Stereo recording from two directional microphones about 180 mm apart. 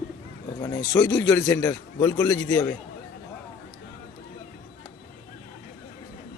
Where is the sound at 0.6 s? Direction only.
20° left (ahead or behind).